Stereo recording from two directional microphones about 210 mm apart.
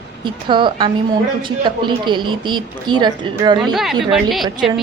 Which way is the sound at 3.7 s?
Centre (ahead or behind).